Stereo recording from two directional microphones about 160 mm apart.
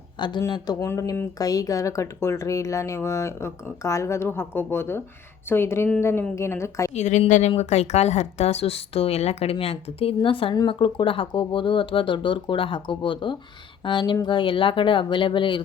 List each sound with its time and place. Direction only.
0.2 s a woman's voice: 25° left (ahead or behind)
6.9 s speech: 45° left (ahead or behind)